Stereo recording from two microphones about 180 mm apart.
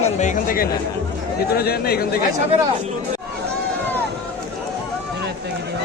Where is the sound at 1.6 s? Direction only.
60° left (ahead or behind).